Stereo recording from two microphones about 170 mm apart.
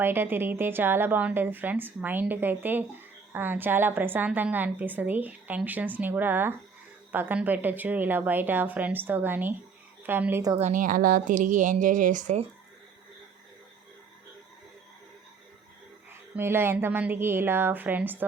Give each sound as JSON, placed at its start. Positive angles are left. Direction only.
{"t": 0.0, "sound": "a woman's voice", "side_deg": -10}
{"t": 10.6, "sound": "speech", "side_deg": -50}
{"t": 16.3, "sound": "a woman's voice", "side_deg": -15}